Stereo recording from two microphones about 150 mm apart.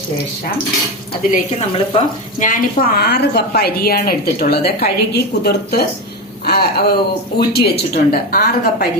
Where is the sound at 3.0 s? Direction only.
90° left.